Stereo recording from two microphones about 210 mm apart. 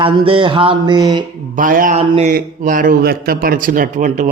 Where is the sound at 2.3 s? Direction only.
40° right (ahead or behind).